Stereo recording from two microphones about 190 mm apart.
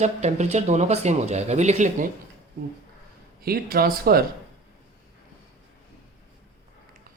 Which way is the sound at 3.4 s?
50° right (ahead or behind).